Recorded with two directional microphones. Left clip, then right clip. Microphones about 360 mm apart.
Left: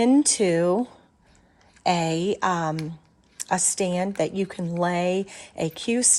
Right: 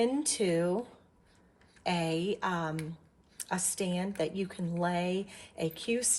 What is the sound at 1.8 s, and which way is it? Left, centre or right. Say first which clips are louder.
A woman's voice: left 9 dB; centre.